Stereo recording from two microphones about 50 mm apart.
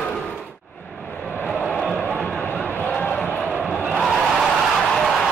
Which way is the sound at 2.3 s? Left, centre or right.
Left.